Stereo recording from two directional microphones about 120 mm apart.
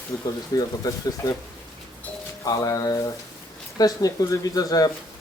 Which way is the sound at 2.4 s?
30° left (ahead or behind).